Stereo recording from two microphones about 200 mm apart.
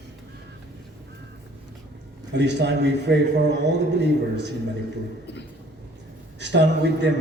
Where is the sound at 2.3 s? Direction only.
60° right (ahead or behind).